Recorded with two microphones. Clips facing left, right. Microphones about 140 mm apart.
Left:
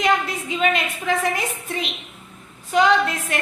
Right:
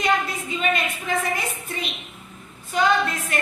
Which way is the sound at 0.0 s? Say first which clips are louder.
Left 2 dB; 90° left.